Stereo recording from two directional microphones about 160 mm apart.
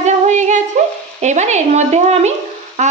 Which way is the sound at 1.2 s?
45° right (ahead or behind).